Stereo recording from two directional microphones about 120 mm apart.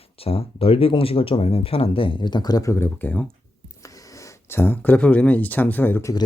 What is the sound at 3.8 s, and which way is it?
Speech, 25° left (ahead or behind).